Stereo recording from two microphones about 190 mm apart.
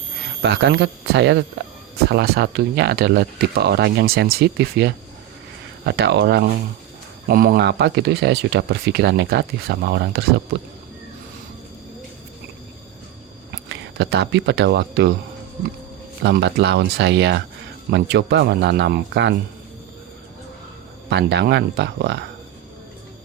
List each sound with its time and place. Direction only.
0.4 s speech: 70° right (ahead or behind)
13.5 s speech: 65° right (ahead or behind)
16.2 s speech: 65° right (ahead or behind)
21.1 s speech: 65° right (ahead or behind)